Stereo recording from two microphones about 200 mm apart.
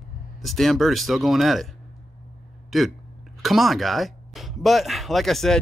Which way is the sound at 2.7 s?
Centre (ahead or behind).